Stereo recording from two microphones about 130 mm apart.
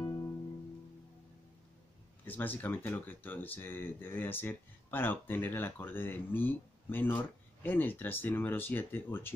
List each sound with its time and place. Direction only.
0.0 s music: 35° left (ahead or behind)
2.2 s speech: 15° left (ahead or behind)